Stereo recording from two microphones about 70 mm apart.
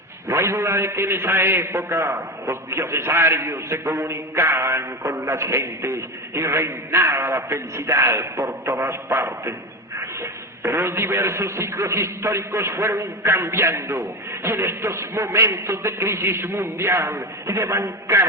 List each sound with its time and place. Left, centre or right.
0.3 s speech: right
10.7 s speech: right